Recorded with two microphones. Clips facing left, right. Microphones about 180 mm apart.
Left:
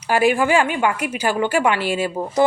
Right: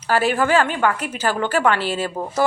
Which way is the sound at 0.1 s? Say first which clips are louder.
Left 1 dB; 10° left (ahead or behind).